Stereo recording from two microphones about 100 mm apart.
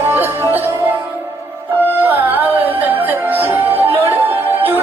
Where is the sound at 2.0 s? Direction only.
20° right (ahead or behind).